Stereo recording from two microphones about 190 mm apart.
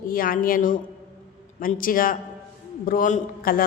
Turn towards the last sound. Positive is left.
turn(degrees=45)  # may be behind; listen again after turning